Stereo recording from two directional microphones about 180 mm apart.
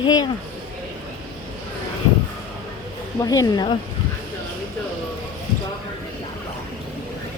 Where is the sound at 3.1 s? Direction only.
20° left (ahead or behind).